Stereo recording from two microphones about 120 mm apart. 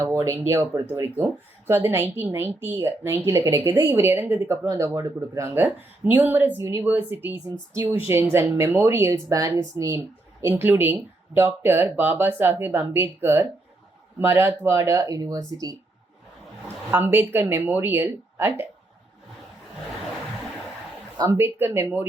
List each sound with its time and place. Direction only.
0.0 s speech: 25° right (ahead or behind)
10.5 s speech: 15° right (ahead or behind); by 15.5 s 30° right (ahead or behind)
16.9 s speech: 15° right (ahead or behind)
21.2 s speech: 20° right (ahead or behind)